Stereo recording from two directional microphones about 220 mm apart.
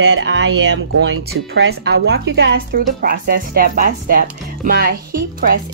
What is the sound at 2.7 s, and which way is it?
A woman's voice, 40° right (ahead or behind).